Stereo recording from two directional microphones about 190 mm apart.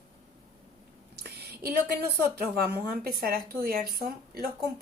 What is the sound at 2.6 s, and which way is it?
A woman's voice, 55° right (ahead or behind).